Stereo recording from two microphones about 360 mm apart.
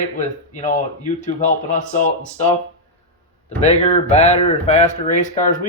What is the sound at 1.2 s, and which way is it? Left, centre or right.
Speech, left.